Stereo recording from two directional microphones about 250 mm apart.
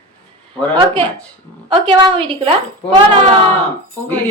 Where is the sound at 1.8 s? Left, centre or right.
Centre.